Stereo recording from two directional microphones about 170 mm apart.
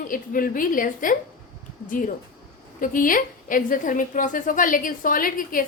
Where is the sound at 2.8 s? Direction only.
55° left (ahead or behind).